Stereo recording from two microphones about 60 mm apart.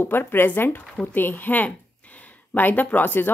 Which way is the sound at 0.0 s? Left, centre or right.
Left.